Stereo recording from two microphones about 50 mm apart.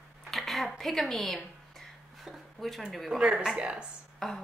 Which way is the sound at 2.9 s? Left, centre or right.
Centre.